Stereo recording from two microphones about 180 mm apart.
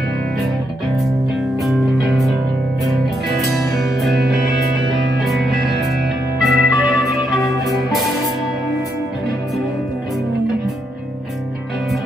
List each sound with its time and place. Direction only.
1.6 s music: centre (ahead or behind)
3.3 s music: centre (ahead or behind)
5.2 s music: centre (ahead or behind)